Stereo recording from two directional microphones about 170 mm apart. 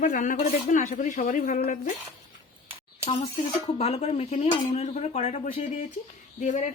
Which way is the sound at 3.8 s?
40° left (ahead or behind).